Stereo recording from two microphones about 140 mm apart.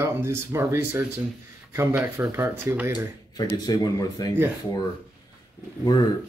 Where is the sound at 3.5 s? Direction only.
25° left (ahead or behind).